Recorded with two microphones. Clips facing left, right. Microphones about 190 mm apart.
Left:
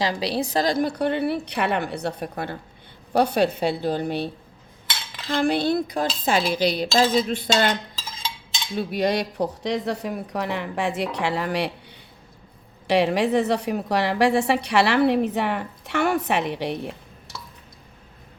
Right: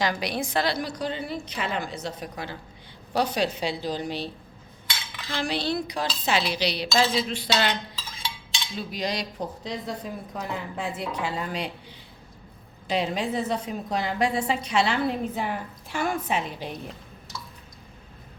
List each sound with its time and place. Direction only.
0.0 s a woman's voice: 30° left (ahead or behind); by 4.3 s 55° left (ahead or behind)
5.3 s speech: 55° left (ahead or behind)
8.7 s a woman's voice: 60° left (ahead or behind)
12.9 s a woman's voice: 75° left (ahead or behind)